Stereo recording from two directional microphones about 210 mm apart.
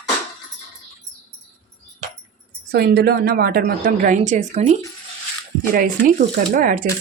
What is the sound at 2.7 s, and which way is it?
Speech, 50° right (ahead or behind).